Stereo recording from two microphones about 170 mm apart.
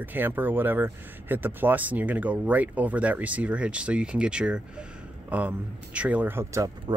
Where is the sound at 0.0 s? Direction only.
10° right (ahead or behind).